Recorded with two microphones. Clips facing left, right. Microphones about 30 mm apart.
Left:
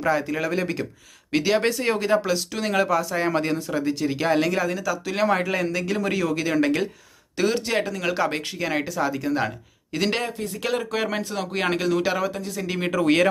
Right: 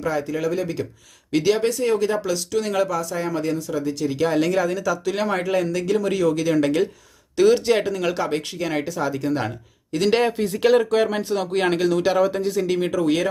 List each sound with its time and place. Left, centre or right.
0.0 s speech: left
1.3 s speech: centre
1.8 s speech: left
3.2 s speech: left; by 4.4 s centre
4.4 s speech: centre
8.1 s speech: centre
10.2 s speech: right
10.6 s speech: centre
10.9 s speech: centre
11.2 s speech: centre
11.5 s speech: centre
12.8 s speech: left